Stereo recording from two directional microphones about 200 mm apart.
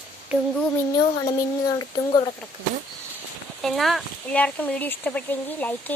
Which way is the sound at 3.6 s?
Centre (ahead or behind).